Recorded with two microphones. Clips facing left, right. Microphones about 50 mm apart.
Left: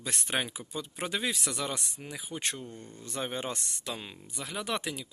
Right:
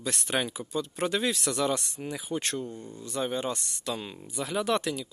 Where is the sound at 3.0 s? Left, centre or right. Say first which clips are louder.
Right 4 dB; left.